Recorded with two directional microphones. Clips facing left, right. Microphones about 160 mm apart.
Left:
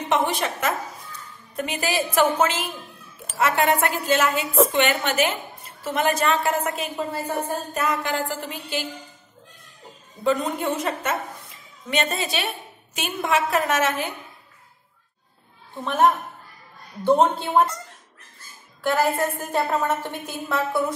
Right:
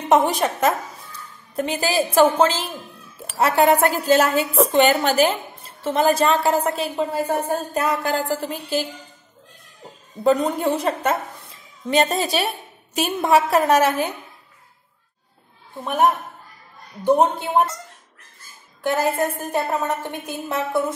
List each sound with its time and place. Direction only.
0.1 s a woman's voice: 40° right (ahead or behind)
10.2 s a woman's voice: 40° right (ahead or behind)
15.8 s speech: 10° right (ahead or behind)
18.8 s a woman's voice: 20° right (ahead or behind)